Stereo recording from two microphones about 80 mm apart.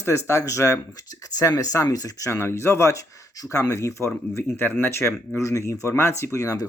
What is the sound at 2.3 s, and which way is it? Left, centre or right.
Speech, left.